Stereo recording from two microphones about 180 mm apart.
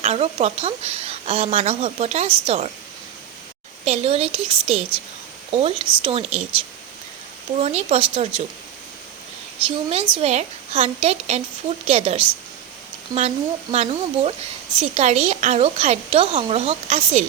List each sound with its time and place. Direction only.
0.0 s a woman's voice: 35° right (ahead or behind)
3.8 s a woman's voice: 35° right (ahead or behind)
7.6 s a woman's voice: 35° right (ahead or behind)
9.6 s a woman's voice: 30° right (ahead or behind)